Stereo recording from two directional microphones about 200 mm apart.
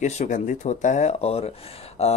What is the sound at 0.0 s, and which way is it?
Speech, 35° left (ahead or behind).